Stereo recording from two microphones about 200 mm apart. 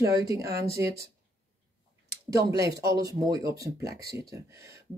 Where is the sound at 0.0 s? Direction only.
15° right (ahead or behind).